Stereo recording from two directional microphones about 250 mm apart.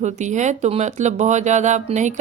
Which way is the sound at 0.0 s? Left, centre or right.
Right.